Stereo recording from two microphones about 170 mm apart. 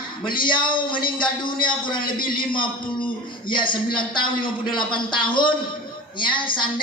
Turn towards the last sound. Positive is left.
turn(degrees=30)  # may be behind; listen again after turning